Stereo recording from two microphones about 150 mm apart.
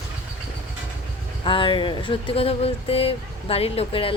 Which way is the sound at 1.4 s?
35° left (ahead or behind).